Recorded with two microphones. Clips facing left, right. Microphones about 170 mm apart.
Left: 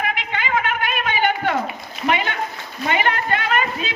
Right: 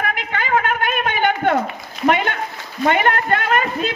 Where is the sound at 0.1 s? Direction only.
45° right (ahead or behind).